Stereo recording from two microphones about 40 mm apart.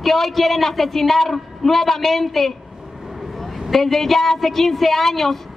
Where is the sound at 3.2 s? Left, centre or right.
Centre.